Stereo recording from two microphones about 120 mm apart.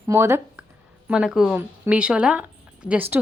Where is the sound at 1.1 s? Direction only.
5° right (ahead or behind).